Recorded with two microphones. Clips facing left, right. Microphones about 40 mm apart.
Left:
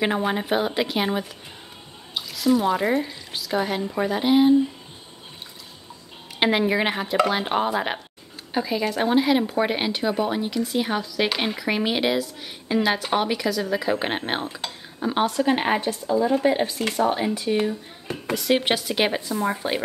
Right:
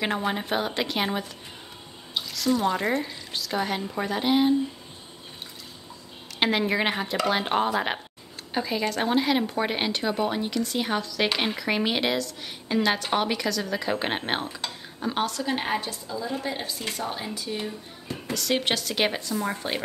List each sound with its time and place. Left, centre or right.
0.3 s a woman's voice: centre
6.4 s a woman's voice: centre
15.2 s a woman's voice: left
18.3 s speech: centre